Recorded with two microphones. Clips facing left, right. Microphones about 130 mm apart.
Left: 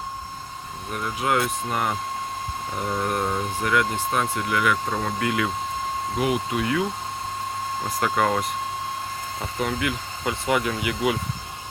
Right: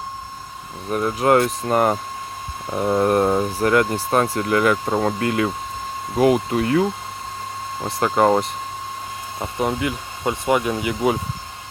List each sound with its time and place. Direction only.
0.9 s speech: 45° right (ahead or behind)
7.9 s speech: 30° right (ahead or behind)